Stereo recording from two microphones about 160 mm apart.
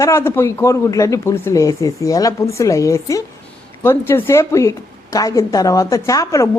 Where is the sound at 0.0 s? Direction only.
15° left (ahead or behind).